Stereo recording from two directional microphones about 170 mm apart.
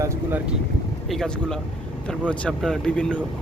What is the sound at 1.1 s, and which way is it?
Speech, 5° left (ahead or behind).